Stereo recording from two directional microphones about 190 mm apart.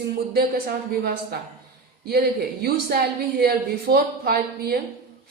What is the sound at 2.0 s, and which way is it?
A woman's voice, 55° right (ahead or behind).